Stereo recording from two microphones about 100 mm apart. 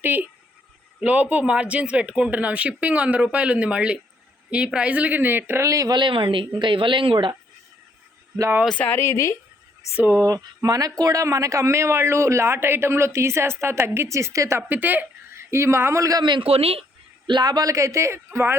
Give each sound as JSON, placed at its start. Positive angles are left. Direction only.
{"t": 0.0, "sound": "a woman's voice", "side_deg": -20}
{"t": 5.9, "sound": "speech", "side_deg": -55}
{"t": 8.6, "sound": "speech", "side_deg": 10}
{"t": 10.0, "sound": "a woman's voice", "side_deg": -20}
{"t": 10.2, "sound": "a woman's voice", "side_deg": -35}
{"t": 14.7, "sound": "a woman's voice", "side_deg": -15}
{"t": 16.2, "sound": "a man's voice", "side_deg": -50}
{"t": 16.5, "sound": "speech", "side_deg": -80}
{"t": 17.2, "sound": "speech", "side_deg": -50}